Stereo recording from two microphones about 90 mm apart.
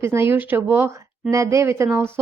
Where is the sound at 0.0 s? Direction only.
30° right (ahead or behind).